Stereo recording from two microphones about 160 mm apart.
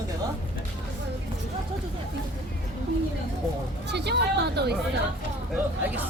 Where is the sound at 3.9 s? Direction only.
90° right.